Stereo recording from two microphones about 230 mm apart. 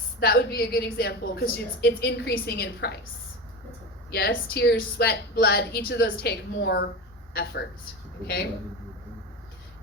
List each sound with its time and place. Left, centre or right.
0.2 s a woman's voice: left
4.1 s a woman's voice: left